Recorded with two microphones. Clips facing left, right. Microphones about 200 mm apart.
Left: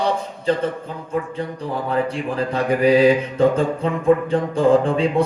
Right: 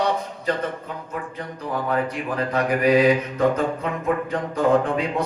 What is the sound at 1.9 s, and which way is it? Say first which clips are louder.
Speech: left 4 dB; 30° left (ahead or behind).